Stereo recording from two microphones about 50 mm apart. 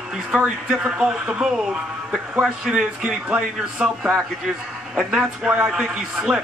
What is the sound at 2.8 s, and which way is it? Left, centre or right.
A man's voice, centre.